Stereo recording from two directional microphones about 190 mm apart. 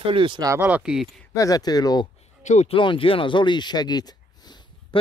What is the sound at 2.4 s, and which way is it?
Speech, 40° left (ahead or behind).